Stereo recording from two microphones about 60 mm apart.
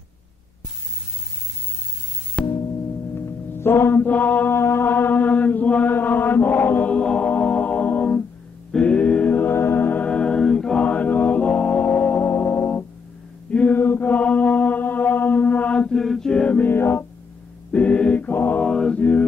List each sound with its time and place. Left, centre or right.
2.4 s music: left
3.2 s mantra: left
4.6 s mantra: left
8.7 s a sound: left
10.0 s a capella: left
10.8 s music: left
13.5 s mantra: left
13.7 s chant: left
15.9 s mantra: centre
16.6 s music: left
17.7 s mantra: left
18.3 s mantra: left
18.6 s mantra: centre
18.9 s mantra: left